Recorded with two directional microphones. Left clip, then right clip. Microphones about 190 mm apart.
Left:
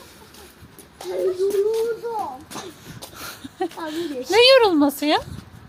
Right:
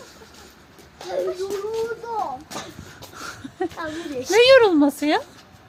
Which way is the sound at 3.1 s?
10° right (ahead or behind).